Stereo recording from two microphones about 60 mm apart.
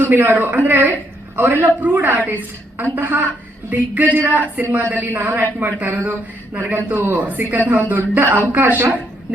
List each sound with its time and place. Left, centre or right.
0.0 s a woman's voice: right